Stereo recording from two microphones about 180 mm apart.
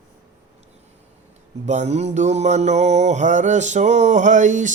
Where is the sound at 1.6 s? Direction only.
40° right (ahead or behind).